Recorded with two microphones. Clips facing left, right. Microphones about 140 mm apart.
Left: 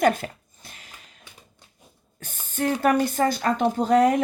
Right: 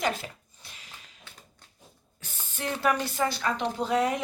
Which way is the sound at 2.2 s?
45° left (ahead or behind).